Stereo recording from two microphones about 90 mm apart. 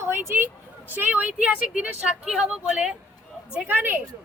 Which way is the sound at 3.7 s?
20° right (ahead or behind).